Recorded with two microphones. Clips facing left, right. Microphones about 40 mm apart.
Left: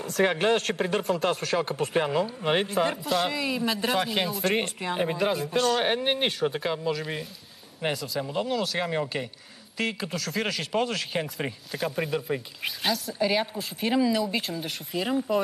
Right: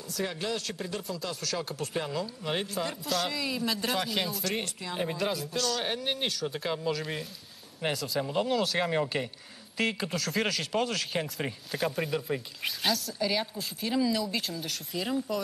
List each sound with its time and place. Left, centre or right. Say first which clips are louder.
0.0 s speech: left 10 dB; left
1.4 s speech: left 7 dB; left
3.1 s speech: left 5 dB; centre
4.5 s speech: left 7 dB; left
4.9 s speech: left 5 dB; left
5.4 s speech: left 7 dB; left
6.6 s speech: left 3 dB; centre
13.2 s speech: left 5 dB; left